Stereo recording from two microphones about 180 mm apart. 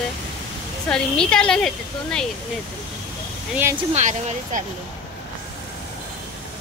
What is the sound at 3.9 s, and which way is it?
Speech, 40° right (ahead or behind).